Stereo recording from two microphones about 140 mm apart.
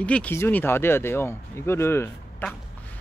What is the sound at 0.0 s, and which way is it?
Speech, 10° left (ahead or behind).